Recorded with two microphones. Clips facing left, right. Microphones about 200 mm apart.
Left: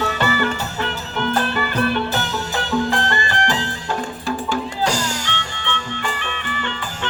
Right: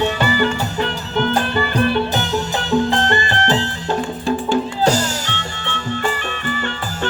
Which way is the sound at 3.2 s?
35° right (ahead or behind).